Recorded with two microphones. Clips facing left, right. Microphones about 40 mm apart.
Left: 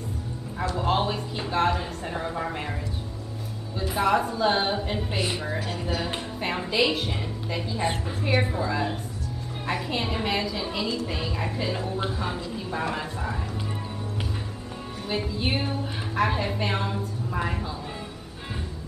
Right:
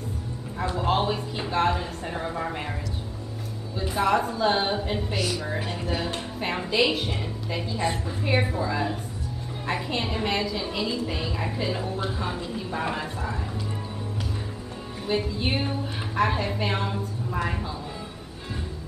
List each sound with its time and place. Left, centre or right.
0.7 s a woman's voice: centre
3.9 s a woman's voice: centre
5.1 s a woman's voice: left
5.7 s a woman's voice: centre
12.9 s speech: centre
15.0 s a woman's voice: centre